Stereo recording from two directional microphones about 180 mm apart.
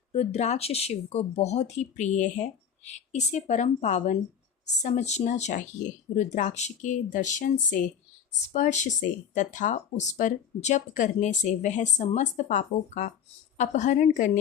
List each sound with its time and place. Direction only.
0.2 s speech: 35° left (ahead or behind)